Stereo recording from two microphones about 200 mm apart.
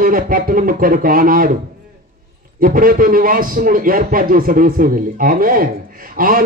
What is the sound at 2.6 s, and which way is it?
A man's voice, 45° right (ahead or behind).